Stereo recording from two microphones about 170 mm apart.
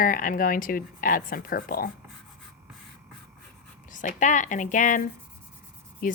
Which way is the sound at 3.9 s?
50° left (ahead or behind).